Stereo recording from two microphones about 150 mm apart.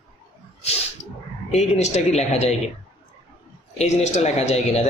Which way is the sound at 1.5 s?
50° left (ahead or behind).